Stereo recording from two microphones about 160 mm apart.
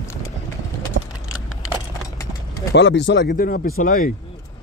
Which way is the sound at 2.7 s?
90° left.